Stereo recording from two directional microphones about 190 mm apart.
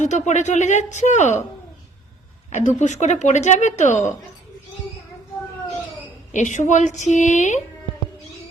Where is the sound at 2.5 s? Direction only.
40° left (ahead or behind).